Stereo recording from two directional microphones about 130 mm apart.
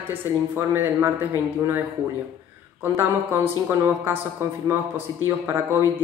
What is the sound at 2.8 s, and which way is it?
A man's voice, 15° right (ahead or behind).